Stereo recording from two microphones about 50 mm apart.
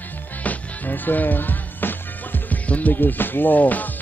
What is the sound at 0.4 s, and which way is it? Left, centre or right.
Music, left.